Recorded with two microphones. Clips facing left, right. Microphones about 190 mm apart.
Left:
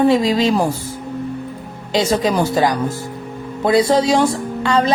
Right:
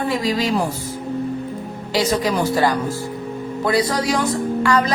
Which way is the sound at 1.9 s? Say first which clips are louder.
Left 3 dB; 25° left (ahead or behind).